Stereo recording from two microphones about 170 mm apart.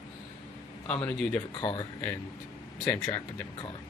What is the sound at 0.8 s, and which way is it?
Speech, 10° left (ahead or behind).